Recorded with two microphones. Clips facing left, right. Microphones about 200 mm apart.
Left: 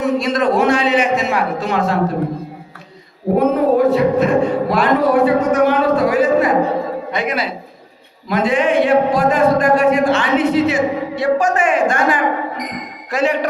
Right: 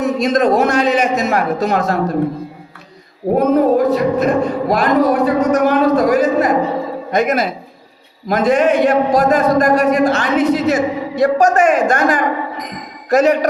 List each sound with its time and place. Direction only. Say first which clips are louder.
0.0 s a man's voice: right 2 dB; 40° right (ahead or behind)
3.3 s a man's voice: right 1 dB; 40° right (ahead or behind)